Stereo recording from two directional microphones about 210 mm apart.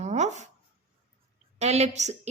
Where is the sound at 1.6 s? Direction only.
30° right (ahead or behind).